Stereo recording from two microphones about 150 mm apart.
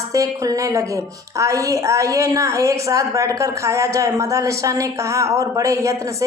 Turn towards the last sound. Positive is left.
turn(degrees=-20)  # may be behind; listen again after turning